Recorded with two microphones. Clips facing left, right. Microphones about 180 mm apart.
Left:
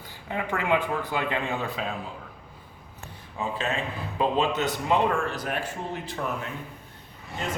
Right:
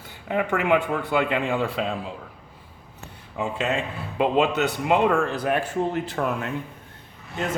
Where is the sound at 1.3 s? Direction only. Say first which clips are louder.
Right 5 dB; 80° right.